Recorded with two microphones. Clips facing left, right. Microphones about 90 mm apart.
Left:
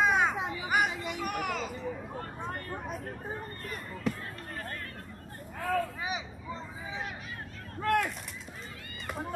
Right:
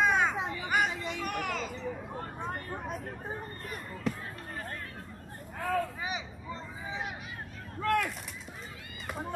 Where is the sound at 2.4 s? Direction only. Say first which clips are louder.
Right 1 dB; 15° right (ahead or behind).